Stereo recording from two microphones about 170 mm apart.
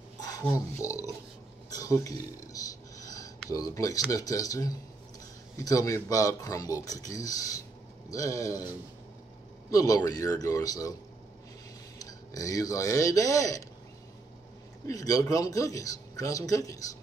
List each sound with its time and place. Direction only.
0.2 s a sound: 20° left (ahead or behind)
0.8 s speech: 20° left (ahead or behind)
9.7 s speech: 20° left (ahead or behind)
12.0 s speech: 20° left (ahead or behind)
14.9 s speech: 20° left (ahead or behind)